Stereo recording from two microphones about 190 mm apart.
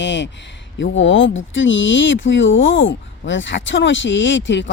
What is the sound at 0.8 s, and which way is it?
Speech, 85° left.